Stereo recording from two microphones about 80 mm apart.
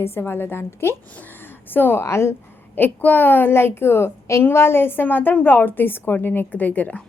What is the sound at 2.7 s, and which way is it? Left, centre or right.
A woman's voice, left.